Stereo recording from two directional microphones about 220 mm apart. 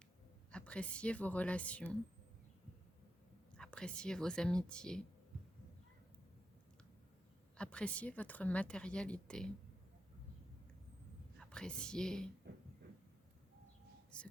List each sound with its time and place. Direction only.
0.5 s a woman's voice: 5° left (ahead or behind)
3.6 s a woman's voice: 5° left (ahead or behind)
7.5 s a woman's voice: 5° left (ahead or behind)
11.3 s a woman's voice: 5° left (ahead or behind)
12.4 s a sound: 50° right (ahead or behind)
14.1 s whispering: 5° left (ahead or behind)